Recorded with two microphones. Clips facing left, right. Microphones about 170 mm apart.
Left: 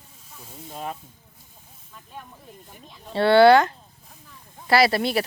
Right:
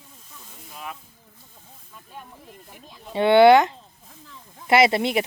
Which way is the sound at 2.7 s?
10° right (ahead or behind).